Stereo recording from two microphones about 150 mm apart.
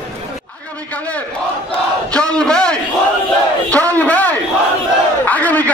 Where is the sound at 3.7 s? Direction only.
10° left (ahead or behind).